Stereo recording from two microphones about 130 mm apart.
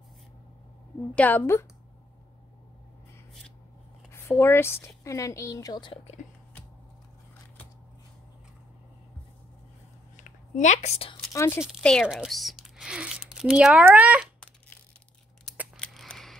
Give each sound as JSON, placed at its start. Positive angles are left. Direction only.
{"t": 1.1, "sound": "a woman's voice", "side_deg": 10}
{"t": 4.1, "sound": "a woman's voice", "side_deg": 20}
{"t": 10.1, "sound": "a sound", "side_deg": 70}
{"t": 11.3, "sound": "a woman's voice", "side_deg": 20}
{"t": 11.8, "sound": "speech", "side_deg": 5}
{"t": 15.7, "sound": "scissors", "side_deg": 5}